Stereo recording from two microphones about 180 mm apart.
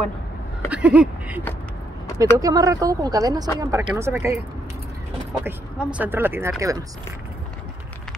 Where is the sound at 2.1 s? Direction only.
20° right (ahead or behind).